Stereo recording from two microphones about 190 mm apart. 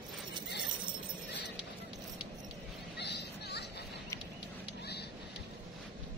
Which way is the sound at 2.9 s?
60° left (ahead or behind).